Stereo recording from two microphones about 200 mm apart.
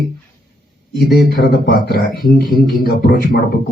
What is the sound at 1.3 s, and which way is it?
Speech, 50° left (ahead or behind).